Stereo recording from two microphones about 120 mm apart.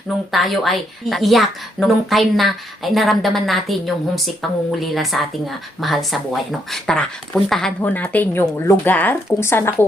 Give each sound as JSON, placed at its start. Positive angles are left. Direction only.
{"t": 0.3, "sound": "a woman's voice", "side_deg": 0}
{"t": 7.8, "sound": "speech", "side_deg": 15}